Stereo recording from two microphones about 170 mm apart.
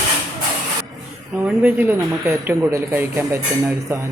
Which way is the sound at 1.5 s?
10° right (ahead or behind).